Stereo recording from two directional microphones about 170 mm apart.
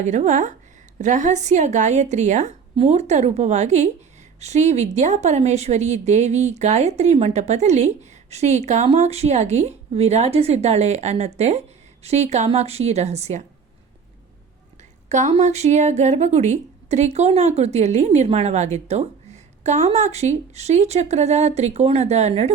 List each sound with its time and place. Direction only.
0.0 s a woman's voice: 45° right (ahead or behind)
14.8 s a woman's voice: 45° right (ahead or behind)